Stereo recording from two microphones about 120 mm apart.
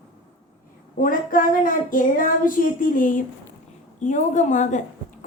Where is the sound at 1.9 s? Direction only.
90° left.